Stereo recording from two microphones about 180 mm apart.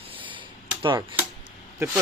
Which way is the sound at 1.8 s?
15° right (ahead or behind).